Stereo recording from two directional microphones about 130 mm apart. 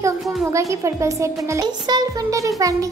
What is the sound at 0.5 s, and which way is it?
Speech, 25° right (ahead or behind).